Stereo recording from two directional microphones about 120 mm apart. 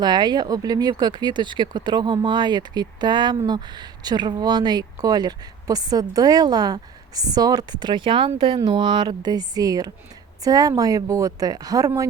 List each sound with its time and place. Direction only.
0.0 s speech: 35° right (ahead or behind)